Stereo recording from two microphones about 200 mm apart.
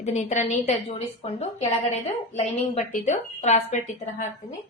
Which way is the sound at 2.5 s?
40° left (ahead or behind).